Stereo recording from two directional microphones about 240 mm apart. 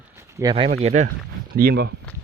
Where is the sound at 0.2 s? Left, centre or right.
Centre.